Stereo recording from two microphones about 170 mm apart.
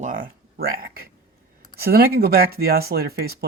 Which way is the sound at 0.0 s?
55° right (ahead or behind).